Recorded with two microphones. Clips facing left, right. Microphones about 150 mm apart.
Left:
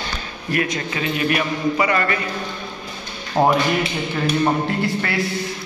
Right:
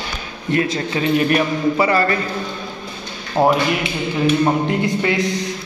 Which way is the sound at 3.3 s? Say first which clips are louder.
Right 1 dB; centre (ahead or behind).